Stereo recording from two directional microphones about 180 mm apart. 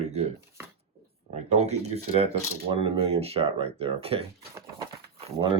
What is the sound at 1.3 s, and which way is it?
Speech, 35° right (ahead or behind).